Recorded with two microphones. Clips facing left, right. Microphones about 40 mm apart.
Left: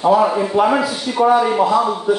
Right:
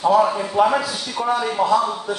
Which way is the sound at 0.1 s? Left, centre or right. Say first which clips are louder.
Left 3 dB; centre.